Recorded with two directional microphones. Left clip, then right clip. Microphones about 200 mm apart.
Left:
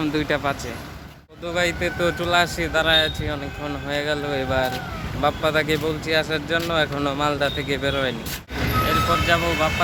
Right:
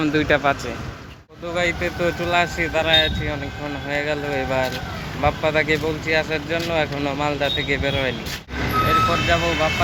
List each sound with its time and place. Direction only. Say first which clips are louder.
0.0 s speech: right 4 dB; centre (ahead or behind)
1.5 s speech: right 1 dB; 15° left (ahead or behind)
8.5 s reversing beeps: right 3 dB; 55° left (ahead or behind)
9.2 s speech: right 1 dB; 15° left (ahead or behind)